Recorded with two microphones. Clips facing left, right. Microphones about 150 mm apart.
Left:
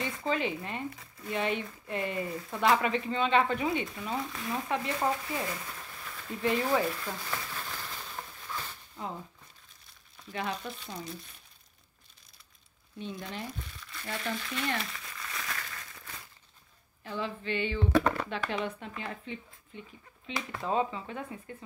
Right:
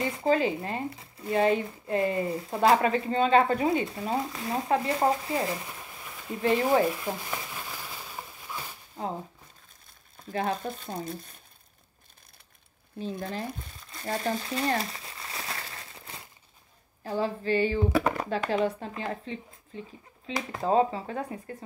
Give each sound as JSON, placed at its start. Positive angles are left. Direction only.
{"t": 0.0, "sound": "speech", "side_deg": -30}
{"t": 6.9, "sound": "a sound", "side_deg": -15}
{"t": 8.9, "sound": "speech", "side_deg": -35}
{"t": 13.2, "sound": "speech", "side_deg": -35}
{"t": 13.6, "sound": "crumpling", "side_deg": -40}
{"t": 17.0, "sound": "speech", "side_deg": -40}